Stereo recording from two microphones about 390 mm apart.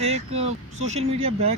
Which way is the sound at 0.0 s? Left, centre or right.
Centre.